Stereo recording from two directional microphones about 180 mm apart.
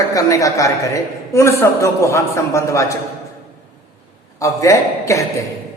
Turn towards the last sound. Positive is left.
turn(degrees=15)  # may be behind; listen again after turning